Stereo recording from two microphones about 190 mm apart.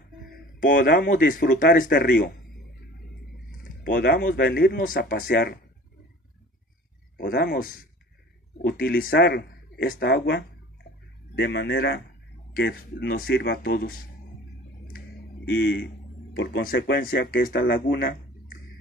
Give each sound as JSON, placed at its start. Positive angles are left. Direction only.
{"t": 0.3, "sound": "speech", "side_deg": 45}
{"t": 3.9, "sound": "speech", "side_deg": 60}
{"t": 7.2, "sound": "speech", "side_deg": 55}
{"t": 14.9, "sound": "a sound", "side_deg": 50}
{"t": 16.6, "sound": "speech", "side_deg": 60}